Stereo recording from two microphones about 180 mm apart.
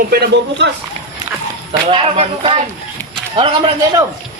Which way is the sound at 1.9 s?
30° right (ahead or behind).